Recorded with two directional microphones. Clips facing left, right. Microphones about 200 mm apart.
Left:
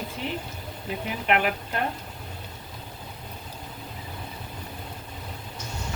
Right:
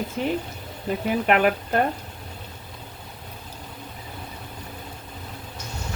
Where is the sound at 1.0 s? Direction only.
45° right (ahead or behind).